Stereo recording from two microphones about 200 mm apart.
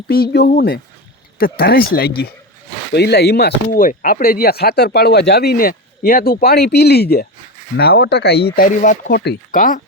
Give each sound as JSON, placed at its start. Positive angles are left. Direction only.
{"t": 0.1, "sound": "speech", "side_deg": 50}